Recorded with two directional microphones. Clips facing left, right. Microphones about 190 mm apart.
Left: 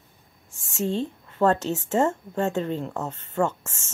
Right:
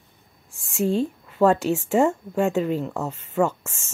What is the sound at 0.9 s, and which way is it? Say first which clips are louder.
Speech: right 4 dB; 10° right (ahead or behind).